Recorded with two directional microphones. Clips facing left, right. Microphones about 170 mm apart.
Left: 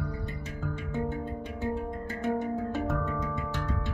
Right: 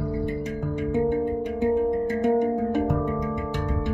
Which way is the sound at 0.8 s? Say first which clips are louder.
Right 11 dB; 15° right (ahead or behind).